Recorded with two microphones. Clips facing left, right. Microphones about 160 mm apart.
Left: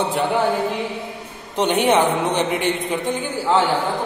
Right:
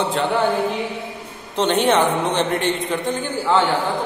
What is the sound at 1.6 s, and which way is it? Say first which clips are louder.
A man's voice: even; 15° left (ahead or behind).